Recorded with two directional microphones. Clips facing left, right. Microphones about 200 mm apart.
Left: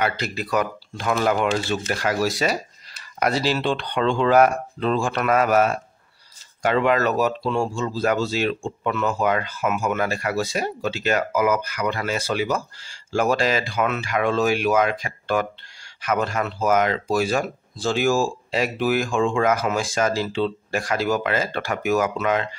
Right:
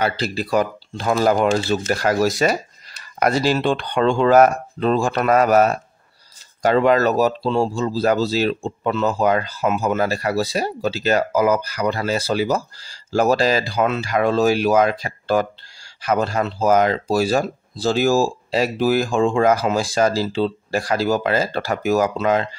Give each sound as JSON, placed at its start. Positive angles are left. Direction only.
{"t": 0.0, "sound": "speech", "side_deg": -30}